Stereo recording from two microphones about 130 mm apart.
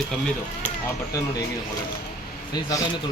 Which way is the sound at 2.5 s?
25° left (ahead or behind).